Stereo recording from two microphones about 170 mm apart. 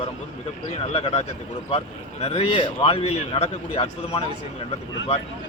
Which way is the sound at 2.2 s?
35° left (ahead or behind).